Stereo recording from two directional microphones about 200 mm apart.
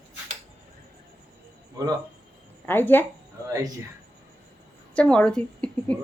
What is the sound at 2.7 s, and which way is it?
Speech, 10° left (ahead or behind).